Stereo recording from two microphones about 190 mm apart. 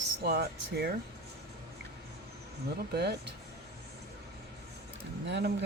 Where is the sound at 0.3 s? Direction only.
55° right (ahead or behind).